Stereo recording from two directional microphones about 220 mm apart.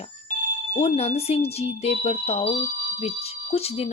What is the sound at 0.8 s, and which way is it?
Speech, 25° left (ahead or behind).